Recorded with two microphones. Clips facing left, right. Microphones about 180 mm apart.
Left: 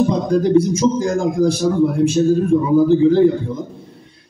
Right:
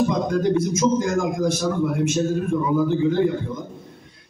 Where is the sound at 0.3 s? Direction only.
35° left (ahead or behind).